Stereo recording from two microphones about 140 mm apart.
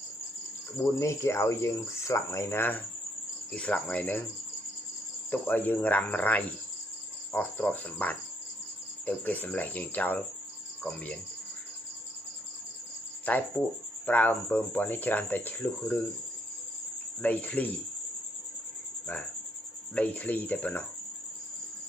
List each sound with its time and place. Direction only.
0.8 s speech: 20° left (ahead or behind)
5.3 s speech: 15° left (ahead or behind)
10.8 s cricket: 10° left (ahead or behind)
13.3 s speech: 10° left (ahead or behind)
17.2 s speech: 10° left (ahead or behind)
20.0 s speech: 10° left (ahead or behind)